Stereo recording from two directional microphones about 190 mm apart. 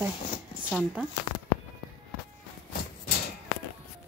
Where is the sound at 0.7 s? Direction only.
5° right (ahead or behind).